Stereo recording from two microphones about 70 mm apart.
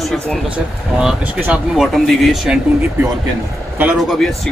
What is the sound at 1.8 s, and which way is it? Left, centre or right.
Speech, centre.